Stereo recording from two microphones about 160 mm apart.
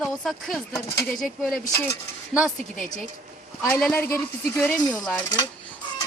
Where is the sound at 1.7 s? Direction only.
15° left (ahead or behind).